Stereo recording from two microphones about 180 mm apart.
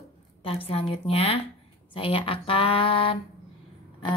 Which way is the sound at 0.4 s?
30° left (ahead or behind).